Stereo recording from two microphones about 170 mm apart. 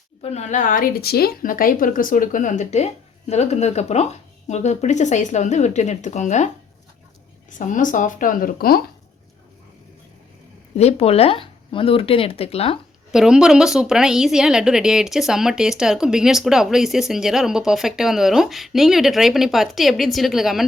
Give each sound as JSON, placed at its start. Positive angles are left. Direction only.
{"t": 0.2, "sound": "speech", "side_deg": 40}
{"t": 7.6, "sound": "speech", "side_deg": 50}
{"t": 10.8, "sound": "speech", "side_deg": 35}
{"t": 13.1, "sound": "a woman's voice", "side_deg": -5}